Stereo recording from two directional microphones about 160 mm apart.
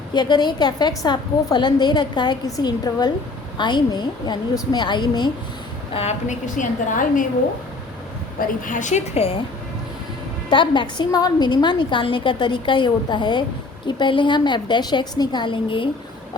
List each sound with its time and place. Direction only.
0.1 s a woman's voice: 25° left (ahead or behind)
5.9 s a woman's voice: 40° left (ahead or behind)
8.4 s a woman's voice: 55° left (ahead or behind); by 9.4 s 40° left (ahead or behind)
10.5 s a woman's voice: 30° left (ahead or behind)